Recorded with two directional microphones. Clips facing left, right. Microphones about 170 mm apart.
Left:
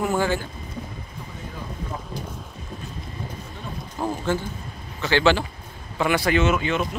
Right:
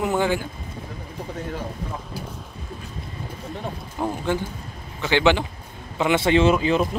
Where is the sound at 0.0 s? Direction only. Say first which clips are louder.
Right 1 dB; 20° right (ahead or behind).